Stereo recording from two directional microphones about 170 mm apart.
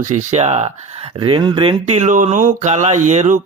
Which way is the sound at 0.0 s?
45° right (ahead or behind).